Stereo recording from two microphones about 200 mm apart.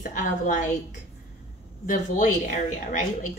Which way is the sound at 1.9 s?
40° left (ahead or behind).